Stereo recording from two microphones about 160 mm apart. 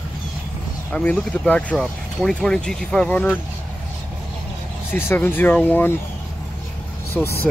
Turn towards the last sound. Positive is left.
turn(degrees=0)  # may be behind; listen again after turning